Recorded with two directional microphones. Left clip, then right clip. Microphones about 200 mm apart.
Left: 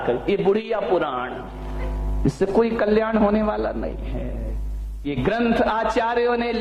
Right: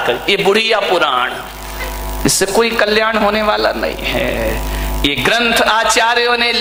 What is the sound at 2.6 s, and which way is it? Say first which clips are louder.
Speech: right 6 dB; 10° right (ahead or behind).